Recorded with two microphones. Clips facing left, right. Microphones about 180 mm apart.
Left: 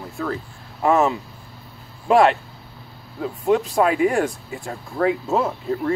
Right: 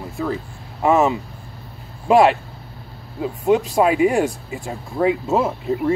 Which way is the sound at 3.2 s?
15° right (ahead or behind).